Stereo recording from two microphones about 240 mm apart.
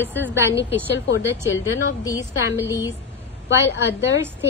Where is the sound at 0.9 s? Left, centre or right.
Left.